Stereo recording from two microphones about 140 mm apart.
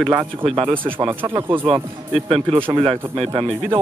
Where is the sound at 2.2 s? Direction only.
40° right (ahead or behind).